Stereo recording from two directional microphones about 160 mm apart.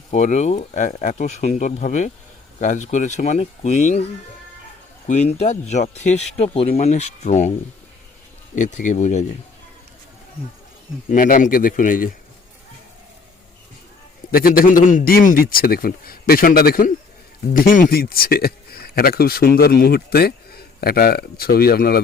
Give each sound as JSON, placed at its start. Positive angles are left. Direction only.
{"t": 0.1, "sound": "speech", "side_deg": 45}
{"t": 5.0, "sound": "speech", "side_deg": 45}
{"t": 8.5, "sound": "speech", "side_deg": 50}
{"t": 11.1, "sound": "a man's voice", "side_deg": 60}
{"t": 14.3, "sound": "a man's voice", "side_deg": 65}